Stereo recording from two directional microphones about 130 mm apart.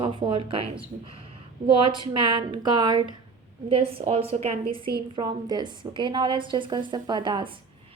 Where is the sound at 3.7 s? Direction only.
45° right (ahead or behind).